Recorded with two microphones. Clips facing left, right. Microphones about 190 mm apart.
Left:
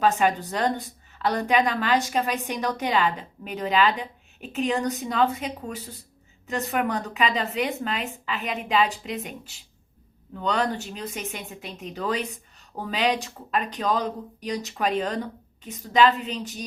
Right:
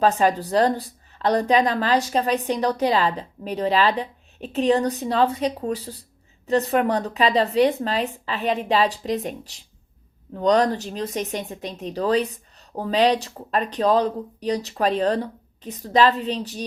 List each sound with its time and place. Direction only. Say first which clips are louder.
0.0 s speech: right 3 dB; 35° right (ahead or behind)